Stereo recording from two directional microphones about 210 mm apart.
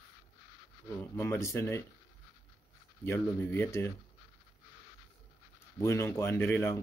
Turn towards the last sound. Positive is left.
turn(degrees=10)  # may be behind; listen again after turning